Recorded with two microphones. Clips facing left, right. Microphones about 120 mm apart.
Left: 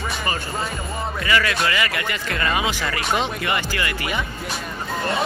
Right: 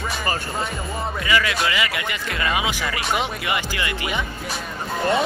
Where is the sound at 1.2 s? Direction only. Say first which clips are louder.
Left 1 dB; 15° right (ahead or behind).